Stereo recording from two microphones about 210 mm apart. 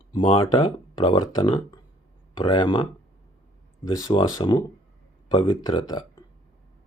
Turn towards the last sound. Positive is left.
turn(degrees=20)  # may be behind; listen again after turning